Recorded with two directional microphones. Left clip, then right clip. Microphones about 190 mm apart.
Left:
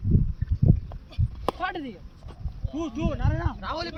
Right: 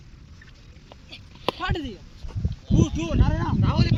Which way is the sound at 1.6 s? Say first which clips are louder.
Right 1 dB; 45° left (ahead or behind).